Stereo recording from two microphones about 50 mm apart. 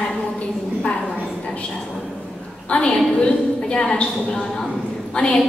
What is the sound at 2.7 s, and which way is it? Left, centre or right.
A woman's voice, left.